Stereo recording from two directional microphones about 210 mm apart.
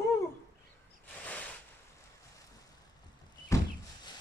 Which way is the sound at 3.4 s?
15° left (ahead or behind).